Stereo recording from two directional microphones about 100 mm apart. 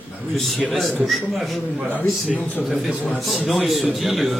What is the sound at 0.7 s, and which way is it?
Speech, centre (ahead or behind).